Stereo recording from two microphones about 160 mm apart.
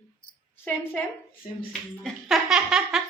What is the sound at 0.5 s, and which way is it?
Speech, 10° left (ahead or behind).